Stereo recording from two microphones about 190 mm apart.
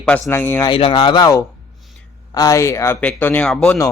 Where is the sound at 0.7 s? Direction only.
25° left (ahead or behind).